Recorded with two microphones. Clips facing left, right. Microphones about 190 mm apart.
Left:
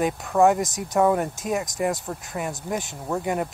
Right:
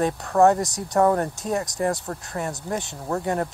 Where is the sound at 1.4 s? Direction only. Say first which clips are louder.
Even; 15° left (ahead or behind).